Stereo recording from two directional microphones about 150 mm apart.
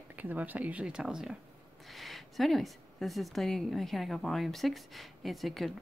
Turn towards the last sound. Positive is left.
turn(degrees=0)  # may be behind; listen again after turning